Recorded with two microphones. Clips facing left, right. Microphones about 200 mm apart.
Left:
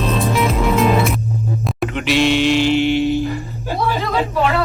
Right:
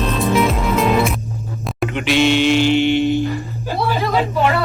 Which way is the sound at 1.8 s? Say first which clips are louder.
Right 1 dB; centre (ahead or behind).